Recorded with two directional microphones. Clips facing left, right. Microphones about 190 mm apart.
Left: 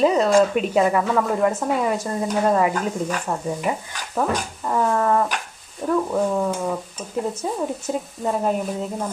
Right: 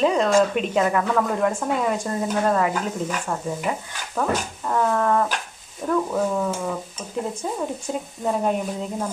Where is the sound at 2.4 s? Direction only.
10° left (ahead or behind).